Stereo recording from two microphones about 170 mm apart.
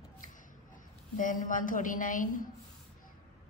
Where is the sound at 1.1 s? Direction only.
50° left (ahead or behind).